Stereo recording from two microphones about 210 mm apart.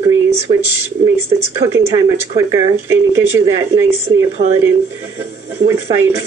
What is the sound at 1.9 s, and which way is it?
Speech, 15° right (ahead or behind).